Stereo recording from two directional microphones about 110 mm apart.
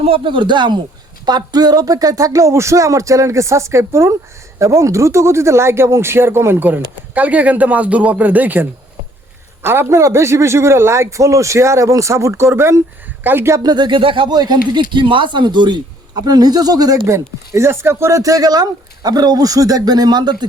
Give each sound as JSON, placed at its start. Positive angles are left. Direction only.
{"t": 0.0, "sound": "a man's voice", "side_deg": -55}
{"t": 9.6, "sound": "a man's voice", "side_deg": -25}
{"t": 13.6, "sound": "speech", "side_deg": -40}